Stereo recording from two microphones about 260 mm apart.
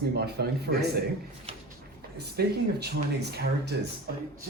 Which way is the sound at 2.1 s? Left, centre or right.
Right.